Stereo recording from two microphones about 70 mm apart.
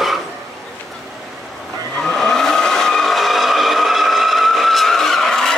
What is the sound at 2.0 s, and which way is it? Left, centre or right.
Vehicle, centre.